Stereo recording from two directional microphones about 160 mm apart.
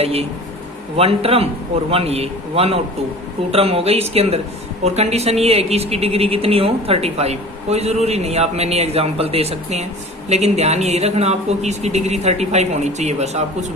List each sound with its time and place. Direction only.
0.0 s a man's voice: 40° right (ahead or behind)